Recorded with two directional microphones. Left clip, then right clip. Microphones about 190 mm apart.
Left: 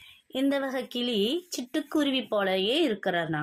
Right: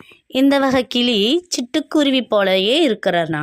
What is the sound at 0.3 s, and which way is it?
Speech, 50° right (ahead or behind).